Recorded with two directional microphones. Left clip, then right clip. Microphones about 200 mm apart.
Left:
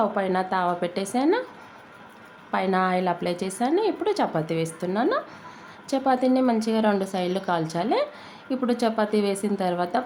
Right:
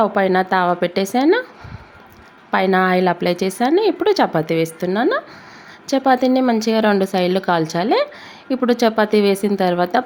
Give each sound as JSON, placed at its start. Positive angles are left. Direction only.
{"t": 0.0, "sound": "a woman's voice", "side_deg": -30}
{"t": 2.5, "sound": "a woman's voice", "side_deg": -30}